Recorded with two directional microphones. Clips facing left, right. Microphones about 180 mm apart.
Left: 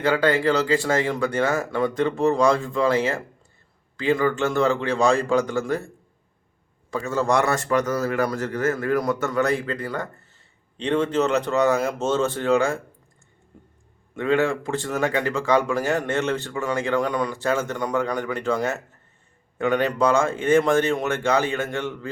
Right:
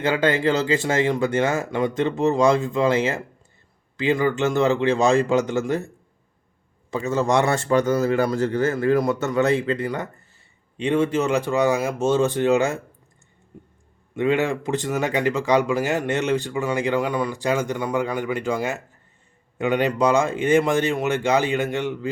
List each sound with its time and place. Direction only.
0.0 s speech: 20° right (ahead or behind)
6.9 s speech: 20° right (ahead or behind)
10.3 s speech: 10° right (ahead or behind)
14.2 s speech: 20° right (ahead or behind)